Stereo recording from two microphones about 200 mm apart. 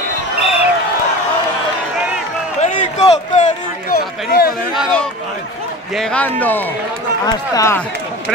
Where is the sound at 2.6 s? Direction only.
35° left (ahead or behind).